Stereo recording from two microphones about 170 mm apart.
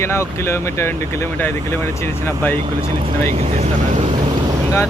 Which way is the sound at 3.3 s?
35° right (ahead or behind).